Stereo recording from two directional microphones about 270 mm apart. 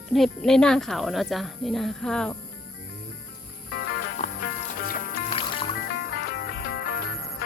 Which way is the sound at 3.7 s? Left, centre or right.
Left.